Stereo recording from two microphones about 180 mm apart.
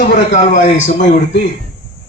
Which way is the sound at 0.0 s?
45° left (ahead or behind).